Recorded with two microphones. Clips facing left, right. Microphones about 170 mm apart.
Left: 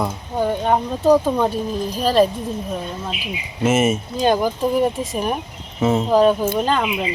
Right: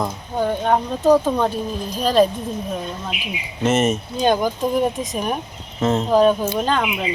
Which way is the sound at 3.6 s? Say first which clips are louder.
Left 1 dB; 5° left (ahead or behind).